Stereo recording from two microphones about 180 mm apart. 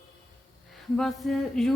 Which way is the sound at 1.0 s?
Centre (ahead or behind).